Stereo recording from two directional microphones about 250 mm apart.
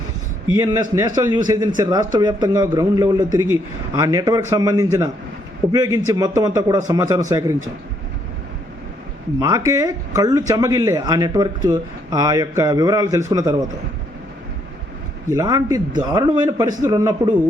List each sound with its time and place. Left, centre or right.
0.5 s speech: centre
9.4 s speech: centre
15.3 s speech: centre